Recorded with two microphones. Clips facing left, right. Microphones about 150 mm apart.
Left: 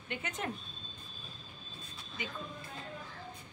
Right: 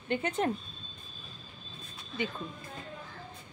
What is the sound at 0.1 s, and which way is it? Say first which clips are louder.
Speech: right 9 dB; 30° right (ahead or behind).